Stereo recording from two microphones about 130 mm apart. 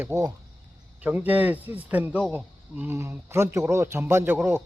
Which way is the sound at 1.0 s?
15° right (ahead or behind).